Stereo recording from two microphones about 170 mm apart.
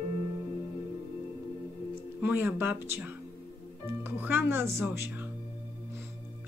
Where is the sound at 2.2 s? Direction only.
10° right (ahead or behind).